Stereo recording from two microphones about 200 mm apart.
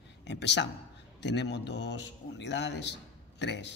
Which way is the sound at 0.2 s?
60° left (ahead or behind).